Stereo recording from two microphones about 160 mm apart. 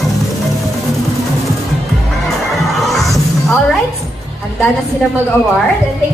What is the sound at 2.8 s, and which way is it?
Music, centre (ahead or behind).